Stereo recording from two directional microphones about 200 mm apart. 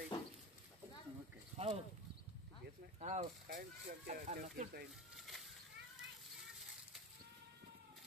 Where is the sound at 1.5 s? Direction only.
30° right (ahead or behind).